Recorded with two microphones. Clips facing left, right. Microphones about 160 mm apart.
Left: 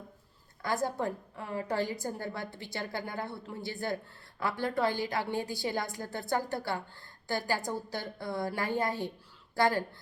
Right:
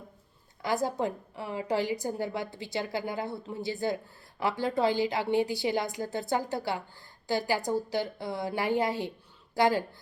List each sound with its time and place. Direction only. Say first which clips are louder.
0.6 s a woman's voice: right 3 dB; 20° right (ahead or behind)